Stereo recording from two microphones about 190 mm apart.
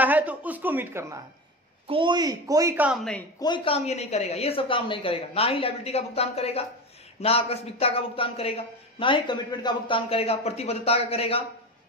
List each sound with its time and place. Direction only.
0.0 s a woman's voice: 10° right (ahead or behind)
1.9 s a woman's voice: 25° right (ahead or behind); by 3.3 s 5° left (ahead or behind)
3.3 s speech: 25° left (ahead or behind)